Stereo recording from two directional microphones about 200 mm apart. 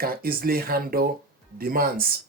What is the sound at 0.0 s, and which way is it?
Speech, 50° right (ahead or behind).